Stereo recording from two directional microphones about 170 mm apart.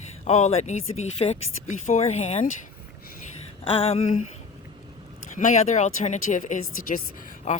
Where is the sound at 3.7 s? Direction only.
35° left (ahead or behind).